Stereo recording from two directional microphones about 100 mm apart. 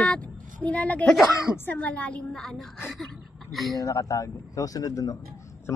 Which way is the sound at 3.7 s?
35° left (ahead or behind).